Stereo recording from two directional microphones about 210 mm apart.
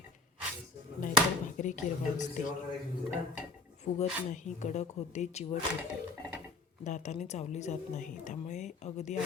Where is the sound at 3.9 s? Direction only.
35° left (ahead or behind).